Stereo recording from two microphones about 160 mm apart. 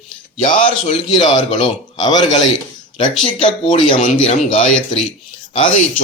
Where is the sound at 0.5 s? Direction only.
50° left (ahead or behind).